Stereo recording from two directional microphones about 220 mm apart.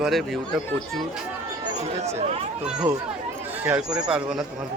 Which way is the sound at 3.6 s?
5° right (ahead or behind).